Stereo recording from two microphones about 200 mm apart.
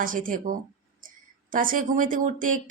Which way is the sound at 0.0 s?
45° right (ahead or behind).